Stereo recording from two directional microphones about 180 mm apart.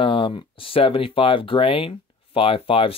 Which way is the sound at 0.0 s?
30° left (ahead or behind).